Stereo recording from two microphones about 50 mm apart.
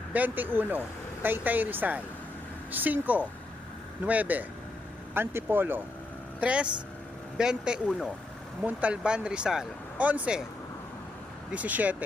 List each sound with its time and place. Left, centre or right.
0.1 s speech: right
5.1 s speech: right
6.4 s a man's voice: right
10.0 s speech: right
11.5 s speech: right